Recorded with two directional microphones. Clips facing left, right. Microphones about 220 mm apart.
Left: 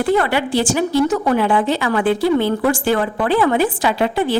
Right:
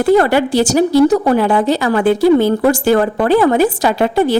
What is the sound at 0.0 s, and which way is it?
Speech, 40° right (ahead or behind).